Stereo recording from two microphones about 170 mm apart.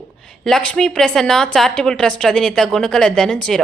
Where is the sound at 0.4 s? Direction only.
5° left (ahead or behind).